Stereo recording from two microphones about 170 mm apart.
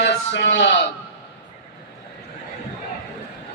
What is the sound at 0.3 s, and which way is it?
Speech, 90° left.